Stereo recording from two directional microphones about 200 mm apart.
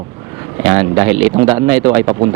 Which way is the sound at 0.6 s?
15° right (ahead or behind).